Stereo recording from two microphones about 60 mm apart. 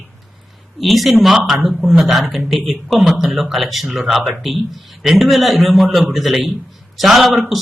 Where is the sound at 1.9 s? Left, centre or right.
Centre.